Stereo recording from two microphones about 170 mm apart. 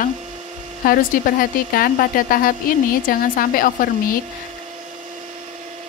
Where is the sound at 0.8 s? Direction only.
55° left (ahead or behind).